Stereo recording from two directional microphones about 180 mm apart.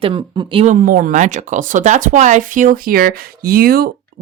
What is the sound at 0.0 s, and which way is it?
Speech, 30° right (ahead or behind).